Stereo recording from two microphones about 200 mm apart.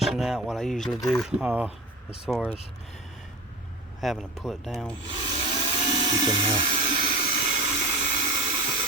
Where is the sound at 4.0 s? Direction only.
Centre (ahead or behind).